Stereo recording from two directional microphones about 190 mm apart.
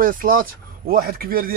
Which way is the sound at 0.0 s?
45° right (ahead or behind).